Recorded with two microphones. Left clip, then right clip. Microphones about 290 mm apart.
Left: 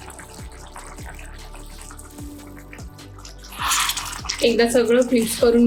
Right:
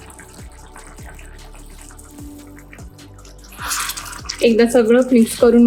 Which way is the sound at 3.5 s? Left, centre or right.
Centre.